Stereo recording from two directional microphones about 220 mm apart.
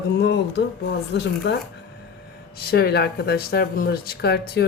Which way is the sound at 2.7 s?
45° left (ahead or behind).